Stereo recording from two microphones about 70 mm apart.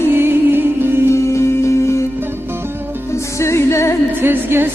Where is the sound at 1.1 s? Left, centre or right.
Left.